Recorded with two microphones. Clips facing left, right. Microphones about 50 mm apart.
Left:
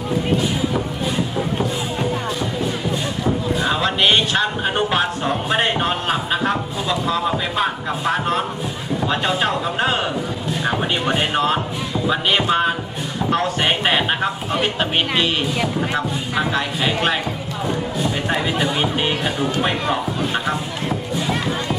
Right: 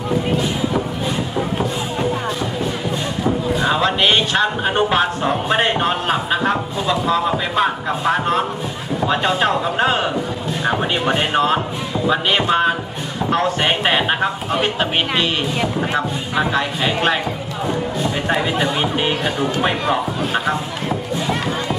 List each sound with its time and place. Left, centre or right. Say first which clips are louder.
1.4 s music: right 1 dB; centre
3.2 s speech: right 2 dB; centre